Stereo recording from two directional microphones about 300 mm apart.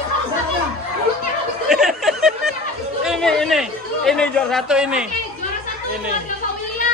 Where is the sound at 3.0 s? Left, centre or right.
Centre.